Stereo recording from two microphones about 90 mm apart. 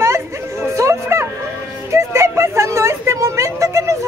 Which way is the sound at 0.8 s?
30° right (ahead or behind).